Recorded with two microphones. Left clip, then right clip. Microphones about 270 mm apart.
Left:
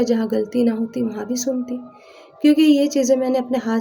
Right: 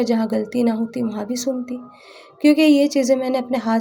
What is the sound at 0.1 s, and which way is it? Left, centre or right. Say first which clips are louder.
Speech: left 1 dB; right.